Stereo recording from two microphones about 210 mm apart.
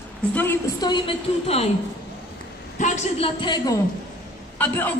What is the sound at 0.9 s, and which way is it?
Speech, 25° left (ahead or behind).